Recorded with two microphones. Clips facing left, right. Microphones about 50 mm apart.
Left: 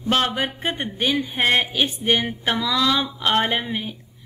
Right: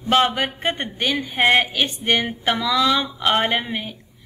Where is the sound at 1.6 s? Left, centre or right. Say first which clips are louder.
Even; centre.